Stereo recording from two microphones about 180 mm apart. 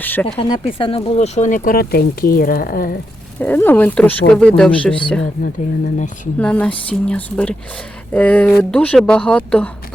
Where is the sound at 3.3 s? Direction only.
10° left (ahead or behind).